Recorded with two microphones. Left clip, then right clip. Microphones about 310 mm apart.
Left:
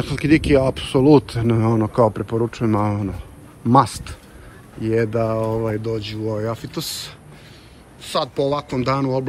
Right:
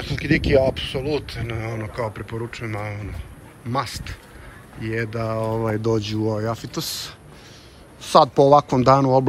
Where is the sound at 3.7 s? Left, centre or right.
Centre.